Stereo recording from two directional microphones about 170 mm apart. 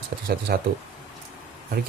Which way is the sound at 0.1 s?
65° right (ahead or behind).